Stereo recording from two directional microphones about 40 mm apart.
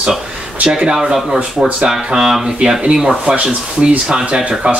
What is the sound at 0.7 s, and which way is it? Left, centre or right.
Speech, centre.